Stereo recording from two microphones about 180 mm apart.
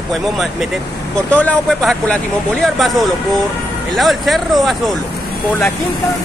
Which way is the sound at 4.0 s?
Centre (ahead or behind).